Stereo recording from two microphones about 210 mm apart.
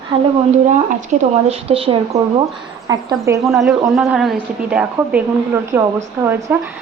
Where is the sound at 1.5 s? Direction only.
25° right (ahead or behind).